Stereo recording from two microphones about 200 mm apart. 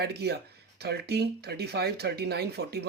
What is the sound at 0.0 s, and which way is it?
Speech, 55° right (ahead or behind).